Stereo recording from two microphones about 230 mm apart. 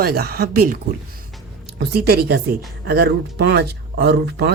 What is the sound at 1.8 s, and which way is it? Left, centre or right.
Speech, right.